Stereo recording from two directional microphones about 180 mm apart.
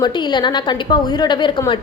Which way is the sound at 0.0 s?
25° left (ahead or behind).